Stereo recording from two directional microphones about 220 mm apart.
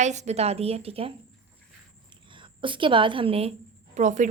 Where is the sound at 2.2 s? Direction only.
20° right (ahead or behind).